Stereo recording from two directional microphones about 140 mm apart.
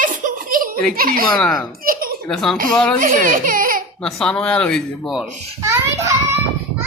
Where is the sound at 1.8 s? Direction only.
90° right.